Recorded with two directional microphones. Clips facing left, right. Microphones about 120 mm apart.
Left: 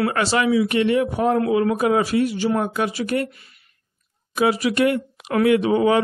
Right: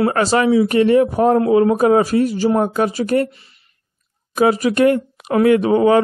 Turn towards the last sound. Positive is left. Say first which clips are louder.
# right 4 dB
turn(degrees=-45)  # may be behind; listen again after turning